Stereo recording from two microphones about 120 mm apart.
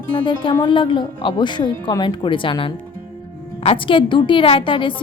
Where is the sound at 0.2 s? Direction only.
40° left (ahead or behind).